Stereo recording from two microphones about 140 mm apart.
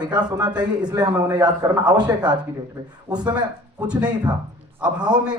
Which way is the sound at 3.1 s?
30° right (ahead or behind).